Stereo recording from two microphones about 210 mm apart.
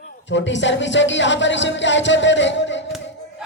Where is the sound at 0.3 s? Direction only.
60° left (ahead or behind).